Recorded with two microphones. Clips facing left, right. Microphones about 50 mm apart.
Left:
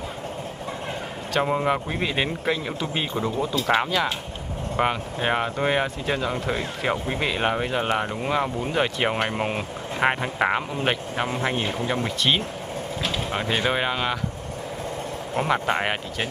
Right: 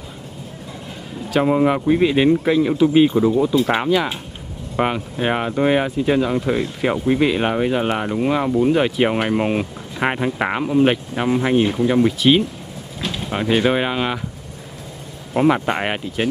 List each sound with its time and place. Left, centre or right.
1.3 s speech: centre
15.3 s speech: centre